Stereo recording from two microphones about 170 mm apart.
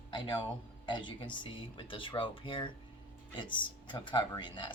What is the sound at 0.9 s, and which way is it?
Speech, 30° left (ahead or behind).